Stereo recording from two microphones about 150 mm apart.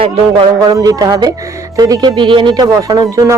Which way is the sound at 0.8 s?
25° right (ahead or behind).